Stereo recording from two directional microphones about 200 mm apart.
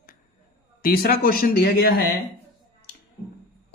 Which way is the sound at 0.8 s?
50° left (ahead or behind).